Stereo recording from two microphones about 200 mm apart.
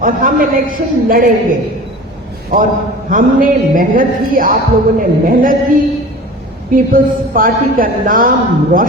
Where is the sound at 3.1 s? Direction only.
45° right (ahead or behind).